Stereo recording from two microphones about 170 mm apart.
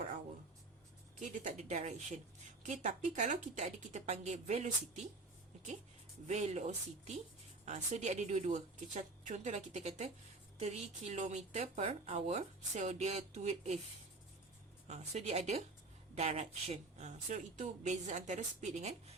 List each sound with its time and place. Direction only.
1.2 s a woman's voice: 50° right (ahead or behind)
6.2 s a woman's voice: 40° right (ahead or behind)
14.8 s a woman's voice: 40° right (ahead or behind)